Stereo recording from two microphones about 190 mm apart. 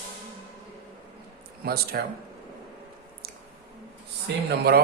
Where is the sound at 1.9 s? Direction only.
55° right (ahead or behind).